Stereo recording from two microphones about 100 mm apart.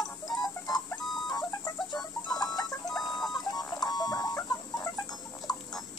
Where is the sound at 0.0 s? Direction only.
40° left (ahead or behind).